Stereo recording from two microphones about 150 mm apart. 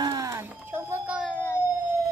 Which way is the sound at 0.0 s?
25° right (ahead or behind).